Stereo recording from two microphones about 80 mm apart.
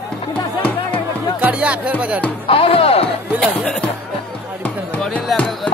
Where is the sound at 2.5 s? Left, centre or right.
Left.